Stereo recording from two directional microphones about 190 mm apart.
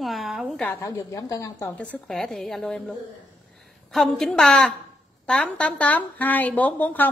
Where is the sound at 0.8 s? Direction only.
15° left (ahead or behind).